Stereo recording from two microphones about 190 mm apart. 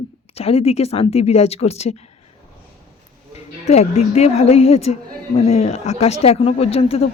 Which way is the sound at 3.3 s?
35° left (ahead or behind).